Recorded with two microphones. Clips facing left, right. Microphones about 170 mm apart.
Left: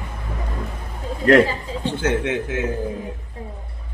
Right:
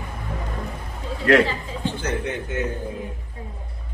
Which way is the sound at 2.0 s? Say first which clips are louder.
Left 5 dB; 90° left.